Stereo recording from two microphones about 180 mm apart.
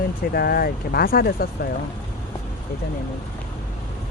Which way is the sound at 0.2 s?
55° left (ahead or behind).